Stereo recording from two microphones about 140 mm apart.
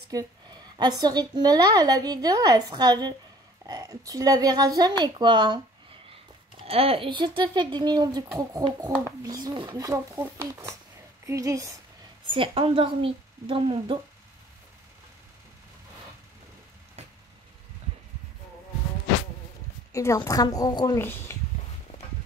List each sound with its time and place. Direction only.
0.1 s speech: 30° right (ahead or behind)
6.6 s speech: 45° right (ahead or behind); by 11.8 s 25° right (ahead or behind)
12.3 s speech: 40° right (ahead or behind)
19.9 s a woman's voice: 20° left (ahead or behind)
21.0 s speech: 15° left (ahead or behind)